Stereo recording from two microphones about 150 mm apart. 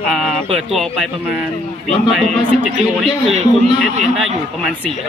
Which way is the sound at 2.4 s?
35° right (ahead or behind).